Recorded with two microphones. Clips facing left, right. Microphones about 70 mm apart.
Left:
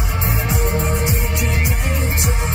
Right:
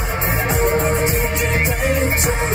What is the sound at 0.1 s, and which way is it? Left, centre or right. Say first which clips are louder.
Music: right 3 dB; right.